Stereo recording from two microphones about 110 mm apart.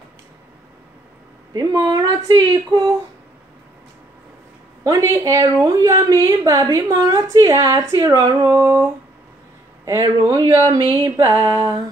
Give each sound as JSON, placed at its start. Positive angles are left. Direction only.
{"t": 1.5, "sound": "a woman's voice", "side_deg": -30}
{"t": 4.8, "sound": "a woman's voice", "side_deg": -30}
{"t": 8.5, "sound": "a sound", "side_deg": -20}
{"t": 9.8, "sound": "a woman's voice", "side_deg": -30}